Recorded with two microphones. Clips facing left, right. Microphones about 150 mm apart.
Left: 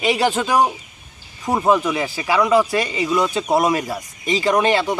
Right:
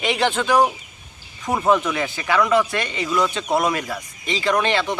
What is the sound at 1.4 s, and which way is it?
Speech, 15° left (ahead or behind).